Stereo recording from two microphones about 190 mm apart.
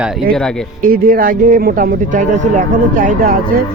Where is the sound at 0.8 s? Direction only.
50° right (ahead or behind).